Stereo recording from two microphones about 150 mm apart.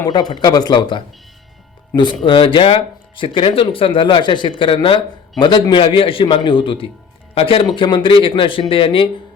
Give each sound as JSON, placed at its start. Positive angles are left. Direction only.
{"t": 0.0, "sound": "speech", "side_deg": 30}
{"t": 2.2, "sound": "speech", "side_deg": 35}